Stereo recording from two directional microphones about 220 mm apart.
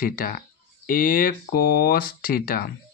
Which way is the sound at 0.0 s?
40° left (ahead or behind).